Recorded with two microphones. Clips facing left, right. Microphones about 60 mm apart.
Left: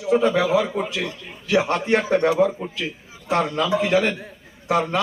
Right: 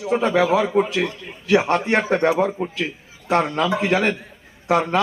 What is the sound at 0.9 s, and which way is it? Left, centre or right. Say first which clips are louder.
A man's voice: right 4 dB; right.